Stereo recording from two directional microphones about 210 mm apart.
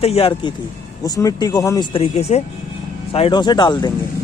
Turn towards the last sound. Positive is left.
turn(degrees=20)  # may be behind; listen again after turning